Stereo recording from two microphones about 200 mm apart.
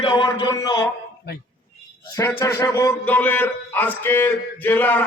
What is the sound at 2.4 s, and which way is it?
Speech, 15° left (ahead or behind).